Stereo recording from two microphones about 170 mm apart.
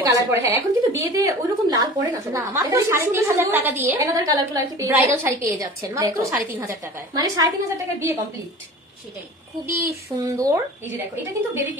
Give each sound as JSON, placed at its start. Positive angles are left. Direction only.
{"t": 0.0, "sound": "a woman's voice", "side_deg": -20}
{"t": 7.2, "sound": "a woman's voice", "side_deg": -20}
{"t": 9.7, "sound": "a woman's voice", "side_deg": -20}